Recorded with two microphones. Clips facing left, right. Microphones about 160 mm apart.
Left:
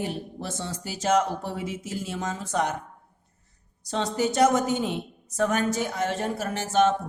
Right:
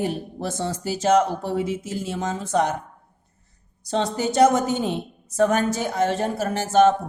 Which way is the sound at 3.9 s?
30° right (ahead or behind).